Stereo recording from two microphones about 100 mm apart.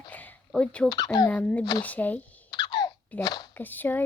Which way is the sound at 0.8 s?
40° left (ahead or behind).